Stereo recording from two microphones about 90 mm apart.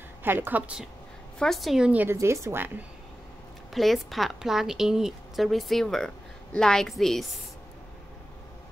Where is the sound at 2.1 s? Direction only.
35° right (ahead or behind).